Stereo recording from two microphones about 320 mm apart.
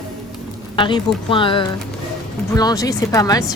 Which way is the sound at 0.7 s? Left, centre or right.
Centre.